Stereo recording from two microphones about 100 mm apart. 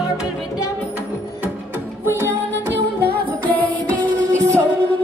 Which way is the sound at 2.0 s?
25° right (ahead or behind).